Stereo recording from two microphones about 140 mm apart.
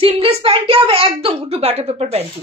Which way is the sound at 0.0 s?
40° right (ahead or behind).